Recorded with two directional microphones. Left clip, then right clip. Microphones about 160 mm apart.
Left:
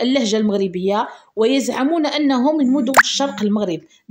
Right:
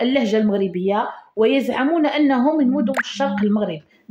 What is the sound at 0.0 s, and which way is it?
Speech, 40° left (ahead or behind).